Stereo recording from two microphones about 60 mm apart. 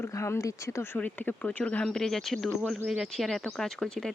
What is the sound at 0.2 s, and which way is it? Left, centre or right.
Speech, left.